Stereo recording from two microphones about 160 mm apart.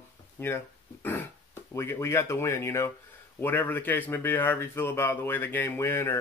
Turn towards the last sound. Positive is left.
turn(degrees=15)  # may be behind; listen again after turning